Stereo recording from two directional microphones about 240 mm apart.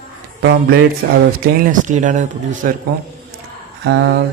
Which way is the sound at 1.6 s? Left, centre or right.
Right.